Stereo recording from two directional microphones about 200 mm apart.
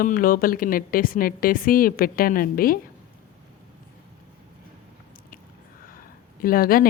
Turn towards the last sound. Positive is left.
turn(degrees=45)  # may be behind; listen again after turning